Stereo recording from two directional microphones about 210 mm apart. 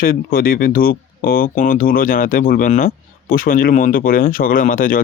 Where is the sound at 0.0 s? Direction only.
45° left (ahead or behind).